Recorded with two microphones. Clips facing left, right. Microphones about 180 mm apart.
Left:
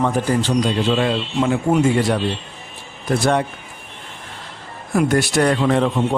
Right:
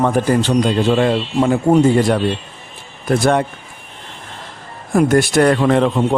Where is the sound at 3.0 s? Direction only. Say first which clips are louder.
Right 3 dB; 50° right (ahead or behind).